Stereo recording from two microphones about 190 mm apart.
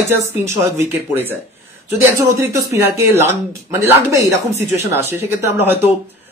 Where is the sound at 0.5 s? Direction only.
15° right (ahead or behind).